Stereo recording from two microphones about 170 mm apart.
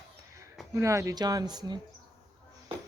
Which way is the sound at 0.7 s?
15° right (ahead or behind).